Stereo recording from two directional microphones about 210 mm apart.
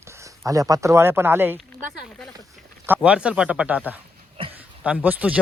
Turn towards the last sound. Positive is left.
turn(degrees=-5)  # may be behind; listen again after turning